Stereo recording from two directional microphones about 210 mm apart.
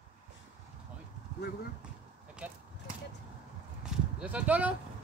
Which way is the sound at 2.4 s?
5° right (ahead or behind).